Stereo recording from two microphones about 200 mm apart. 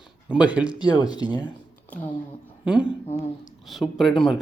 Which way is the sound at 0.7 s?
20° left (ahead or behind).